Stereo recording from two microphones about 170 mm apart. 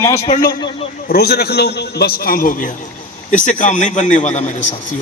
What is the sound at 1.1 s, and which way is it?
A man's voice, 70° left (ahead or behind).